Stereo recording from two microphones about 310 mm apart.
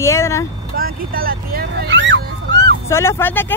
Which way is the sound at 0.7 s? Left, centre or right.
Right.